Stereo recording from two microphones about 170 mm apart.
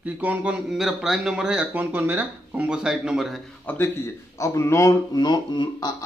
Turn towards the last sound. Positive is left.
turn(degrees=25)  # may be behind; listen again after turning